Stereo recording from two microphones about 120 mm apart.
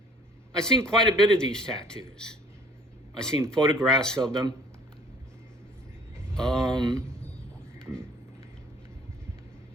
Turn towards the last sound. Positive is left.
turn(degrees=5)  # may be behind; listen again after turning